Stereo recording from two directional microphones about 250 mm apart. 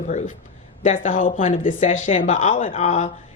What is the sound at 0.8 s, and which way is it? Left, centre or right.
A woman's voice, left.